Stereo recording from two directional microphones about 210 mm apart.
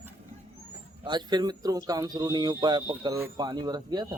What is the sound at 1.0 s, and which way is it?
Speech, 20° right (ahead or behind).